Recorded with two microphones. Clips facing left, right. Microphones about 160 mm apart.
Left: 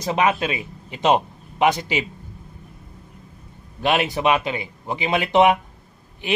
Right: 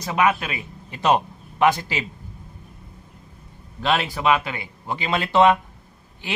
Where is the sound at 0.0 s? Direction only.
25° left (ahead or behind).